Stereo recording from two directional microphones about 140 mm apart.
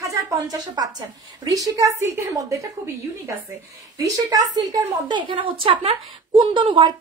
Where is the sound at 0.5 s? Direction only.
30° right (ahead or behind).